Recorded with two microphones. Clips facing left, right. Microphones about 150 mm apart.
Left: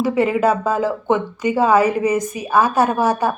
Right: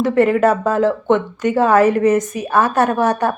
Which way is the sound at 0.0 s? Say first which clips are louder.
Right 3 dB; centre (ahead or behind).